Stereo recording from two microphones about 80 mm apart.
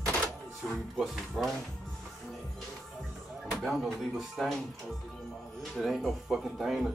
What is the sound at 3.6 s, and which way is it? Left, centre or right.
Speech, centre.